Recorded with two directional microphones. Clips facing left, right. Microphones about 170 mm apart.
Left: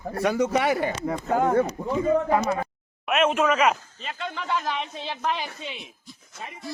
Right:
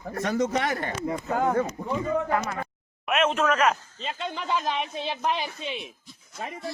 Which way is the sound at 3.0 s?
5° left (ahead or behind).